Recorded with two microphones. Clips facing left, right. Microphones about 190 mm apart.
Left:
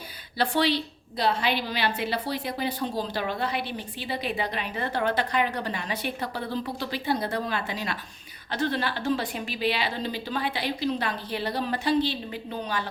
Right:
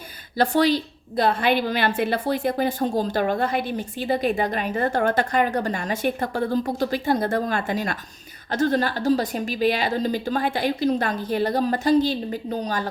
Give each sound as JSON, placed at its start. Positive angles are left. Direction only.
{"t": 0.3, "sound": "a woman's voice", "side_deg": -45}